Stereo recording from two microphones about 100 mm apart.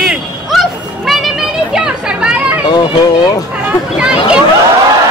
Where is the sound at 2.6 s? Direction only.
40° left (ahead or behind).